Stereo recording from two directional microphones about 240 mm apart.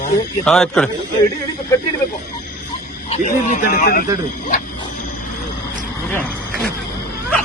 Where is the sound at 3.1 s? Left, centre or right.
Left.